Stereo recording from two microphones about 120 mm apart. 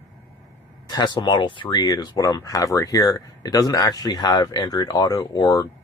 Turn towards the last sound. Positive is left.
turn(degrees=30)  # may be behind; listen again after turning